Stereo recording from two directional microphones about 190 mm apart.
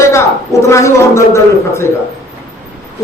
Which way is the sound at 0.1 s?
15° left (ahead or behind).